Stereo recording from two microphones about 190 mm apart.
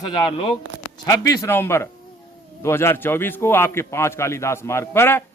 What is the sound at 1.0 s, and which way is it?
A man's voice, 20° left (ahead or behind).